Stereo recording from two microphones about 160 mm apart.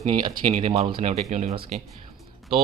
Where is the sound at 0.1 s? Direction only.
25° right (ahead or behind).